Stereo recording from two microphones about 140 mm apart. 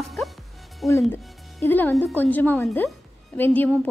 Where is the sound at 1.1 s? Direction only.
15° left (ahead or behind).